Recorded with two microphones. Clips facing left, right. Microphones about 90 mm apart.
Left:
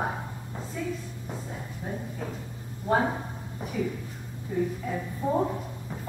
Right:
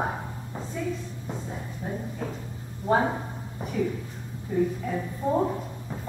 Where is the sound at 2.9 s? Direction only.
5° right (ahead or behind).